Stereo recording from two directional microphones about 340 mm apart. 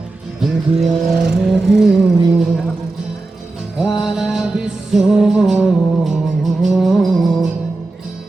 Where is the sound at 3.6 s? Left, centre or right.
Centre.